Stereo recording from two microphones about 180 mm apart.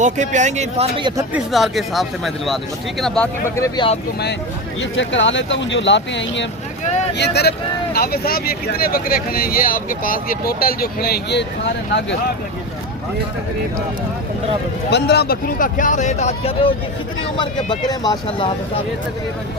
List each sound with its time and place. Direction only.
0.0 s speech: 40° right (ahead or behind)
1.5 s speech: centre (ahead or behind)
3.5 s speech: 15° left (ahead or behind)
4.8 s speech: 90° left
7.1 s speech: 65° left (ahead or behind)
14.8 s speech: 65° left (ahead or behind); by 18.5 s 25° left (ahead or behind)